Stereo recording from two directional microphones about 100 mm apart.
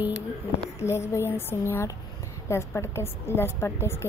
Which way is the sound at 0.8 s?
30° left (ahead or behind).